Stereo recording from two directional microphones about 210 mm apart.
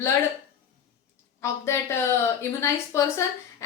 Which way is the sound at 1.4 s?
10° left (ahead or behind).